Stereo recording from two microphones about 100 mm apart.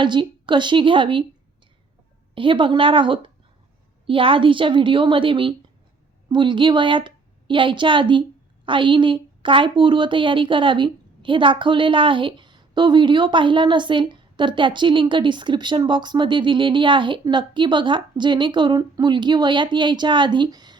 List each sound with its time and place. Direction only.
0.0 s a woman's voice: 50° right (ahead or behind)
2.3 s a woman's voice: 60° right (ahead or behind)